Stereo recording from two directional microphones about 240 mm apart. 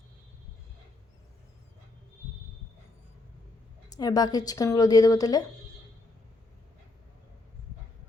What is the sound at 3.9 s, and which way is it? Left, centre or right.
A woman's voice, centre.